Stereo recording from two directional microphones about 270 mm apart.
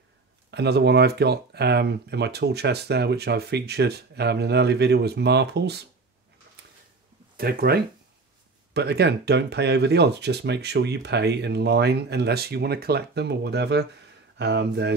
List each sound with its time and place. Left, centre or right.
0.5 s speech: right
7.3 s speech: right